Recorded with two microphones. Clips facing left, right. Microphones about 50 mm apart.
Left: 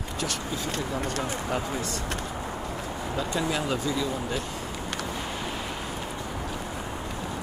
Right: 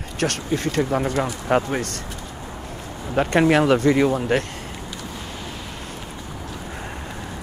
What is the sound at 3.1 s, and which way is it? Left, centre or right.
Speech, right.